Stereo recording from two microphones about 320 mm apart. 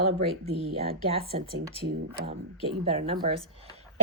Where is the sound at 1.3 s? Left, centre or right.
Right.